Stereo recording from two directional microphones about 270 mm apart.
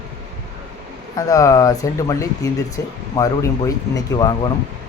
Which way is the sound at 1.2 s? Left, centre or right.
Centre.